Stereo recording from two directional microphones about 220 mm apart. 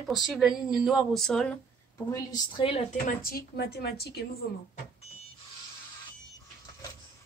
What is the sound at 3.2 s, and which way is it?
A woman's voice, 45° left (ahead or behind).